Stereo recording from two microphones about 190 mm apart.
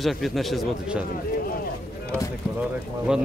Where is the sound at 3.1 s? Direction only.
5° right (ahead or behind).